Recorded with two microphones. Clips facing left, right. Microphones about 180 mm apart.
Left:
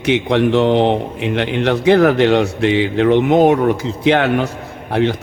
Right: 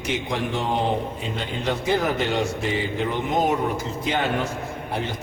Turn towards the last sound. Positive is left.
turn(degrees=75)  # may be behind; listen again after turning